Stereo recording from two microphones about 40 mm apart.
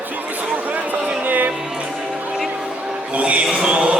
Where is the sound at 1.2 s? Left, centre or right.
Right.